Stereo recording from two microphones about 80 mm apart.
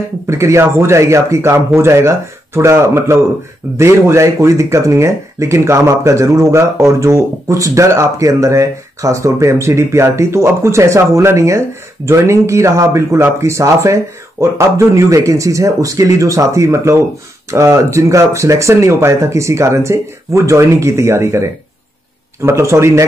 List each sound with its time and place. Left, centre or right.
0.3 s speech: right